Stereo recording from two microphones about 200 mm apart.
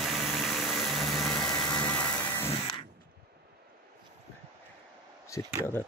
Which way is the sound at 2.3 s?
15° left (ahead or behind).